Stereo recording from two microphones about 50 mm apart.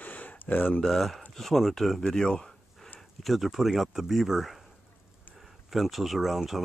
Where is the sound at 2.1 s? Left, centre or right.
Centre.